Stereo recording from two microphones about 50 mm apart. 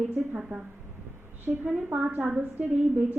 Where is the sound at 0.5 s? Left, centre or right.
Right.